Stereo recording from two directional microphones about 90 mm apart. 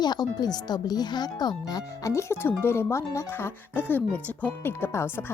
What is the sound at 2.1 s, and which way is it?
Speech, 30° left (ahead or behind).